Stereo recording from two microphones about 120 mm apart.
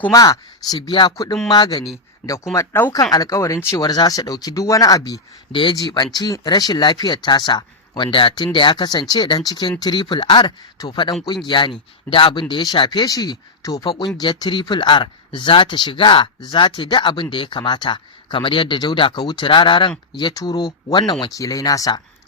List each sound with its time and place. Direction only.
0.1 s speech: 30° left (ahead or behind)
1.1 s speech: 30° left (ahead or behind)
2.5 s speech: 20° left (ahead or behind)
5.5 s speech: 40° left (ahead or behind)
13.8 s speech: 45° left (ahead or behind)
20.1 s speech: 35° left (ahead or behind)